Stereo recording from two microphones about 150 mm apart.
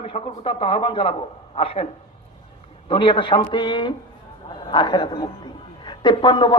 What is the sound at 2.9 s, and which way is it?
A man's voice, 35° left (ahead or behind).